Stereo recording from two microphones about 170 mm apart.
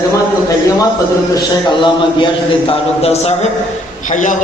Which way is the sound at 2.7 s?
40° left (ahead or behind).